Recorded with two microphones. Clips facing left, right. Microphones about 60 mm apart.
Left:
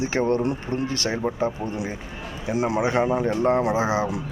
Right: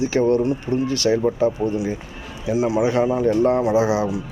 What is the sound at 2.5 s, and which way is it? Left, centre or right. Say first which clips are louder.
Speech: right 4 dB; left.